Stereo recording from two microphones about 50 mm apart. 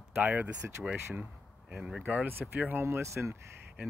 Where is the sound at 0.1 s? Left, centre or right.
Right.